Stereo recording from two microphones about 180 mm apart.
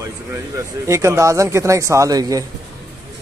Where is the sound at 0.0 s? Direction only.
15° right (ahead or behind).